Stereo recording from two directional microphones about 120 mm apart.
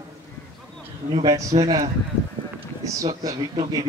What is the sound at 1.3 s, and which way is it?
Speech, 30° right (ahead or behind).